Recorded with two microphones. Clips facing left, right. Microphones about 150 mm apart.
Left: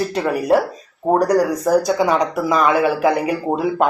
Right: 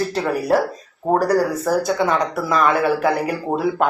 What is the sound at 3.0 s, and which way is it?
Speech, 5° left (ahead or behind).